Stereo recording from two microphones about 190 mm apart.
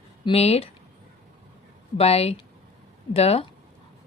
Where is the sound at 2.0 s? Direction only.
30° left (ahead or behind).